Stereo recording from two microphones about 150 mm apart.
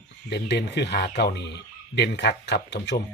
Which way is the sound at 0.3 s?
90° left.